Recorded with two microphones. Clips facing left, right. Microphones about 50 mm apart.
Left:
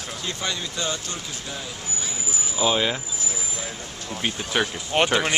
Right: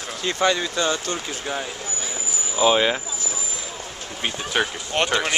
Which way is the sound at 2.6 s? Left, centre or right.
Centre.